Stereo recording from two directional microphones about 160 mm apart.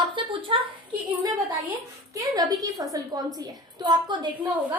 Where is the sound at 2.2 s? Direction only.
20° right (ahead or behind).